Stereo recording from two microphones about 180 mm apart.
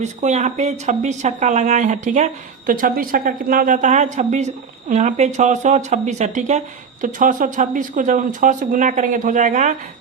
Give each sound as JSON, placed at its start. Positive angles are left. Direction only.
{"t": 0.0, "sound": "a woman's voice", "side_deg": -40}